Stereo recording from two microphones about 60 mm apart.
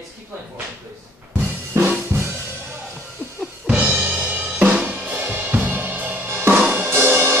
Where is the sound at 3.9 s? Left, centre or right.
Right.